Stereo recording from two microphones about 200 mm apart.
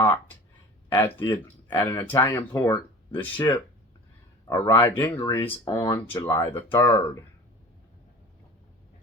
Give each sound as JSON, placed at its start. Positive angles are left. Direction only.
{"t": 0.9, "sound": "speech", "side_deg": 15}
{"t": 5.6, "sound": "speech", "side_deg": 20}